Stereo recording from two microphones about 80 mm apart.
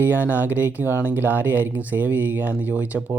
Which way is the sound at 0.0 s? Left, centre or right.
Right.